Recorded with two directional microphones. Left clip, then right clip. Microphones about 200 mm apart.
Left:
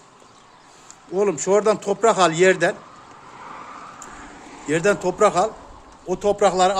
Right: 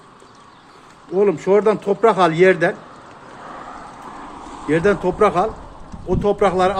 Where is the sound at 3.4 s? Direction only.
25° right (ahead or behind).